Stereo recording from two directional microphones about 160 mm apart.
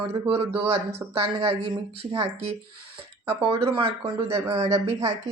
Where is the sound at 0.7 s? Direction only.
40° right (ahead or behind).